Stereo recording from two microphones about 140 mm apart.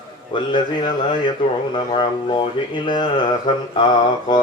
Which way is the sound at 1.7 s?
35° left (ahead or behind).